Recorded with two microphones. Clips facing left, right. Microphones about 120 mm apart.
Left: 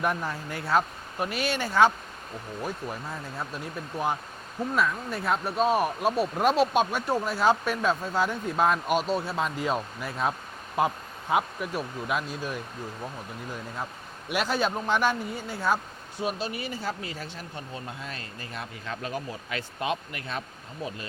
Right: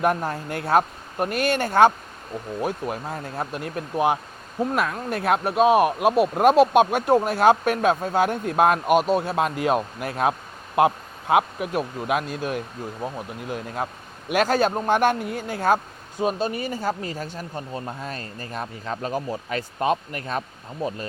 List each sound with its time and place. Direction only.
0.0 s speech: 50° right (ahead or behind); by 6.2 s 70° right (ahead or behind)
6.3 s speech: 50° right (ahead or behind)
14.3 s speech: 45° right (ahead or behind)